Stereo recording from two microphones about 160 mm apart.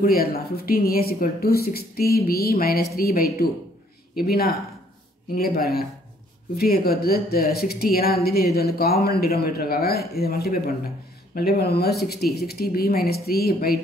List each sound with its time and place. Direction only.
0.0 s speech: 70° left (ahead or behind)